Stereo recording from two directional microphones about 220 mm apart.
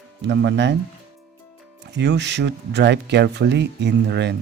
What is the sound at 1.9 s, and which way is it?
Speech, 50° right (ahead or behind).